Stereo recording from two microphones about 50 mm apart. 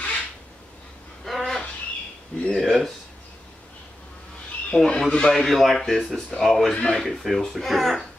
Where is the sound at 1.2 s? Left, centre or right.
Centre.